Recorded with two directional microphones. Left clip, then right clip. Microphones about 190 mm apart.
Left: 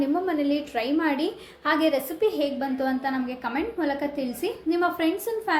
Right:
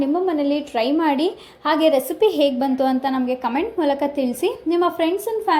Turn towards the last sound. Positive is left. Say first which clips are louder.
# right 6 dB
turn(degrees=-25)  # may be behind; listen again after turning